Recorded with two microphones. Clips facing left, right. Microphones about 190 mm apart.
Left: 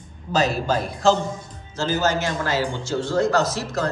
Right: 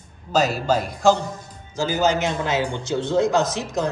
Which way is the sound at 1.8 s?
15° right (ahead or behind).